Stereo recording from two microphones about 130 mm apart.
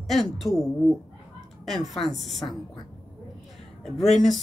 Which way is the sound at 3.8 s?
Centre (ahead or behind).